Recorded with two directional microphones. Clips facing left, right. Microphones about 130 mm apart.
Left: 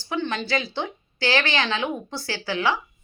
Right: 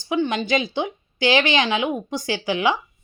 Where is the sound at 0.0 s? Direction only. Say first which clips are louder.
Right 5 dB; 15° right (ahead or behind).